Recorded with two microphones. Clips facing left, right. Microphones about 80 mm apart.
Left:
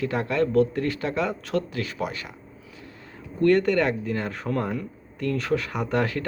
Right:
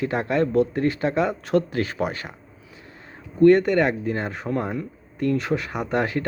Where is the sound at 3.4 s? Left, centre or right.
Right.